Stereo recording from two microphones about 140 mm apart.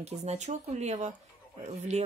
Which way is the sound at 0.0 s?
50° right (ahead or behind).